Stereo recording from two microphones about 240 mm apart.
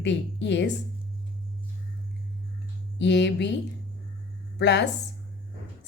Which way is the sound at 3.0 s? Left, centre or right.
Left.